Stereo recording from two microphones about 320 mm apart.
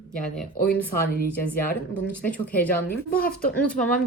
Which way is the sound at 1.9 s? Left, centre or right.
Centre.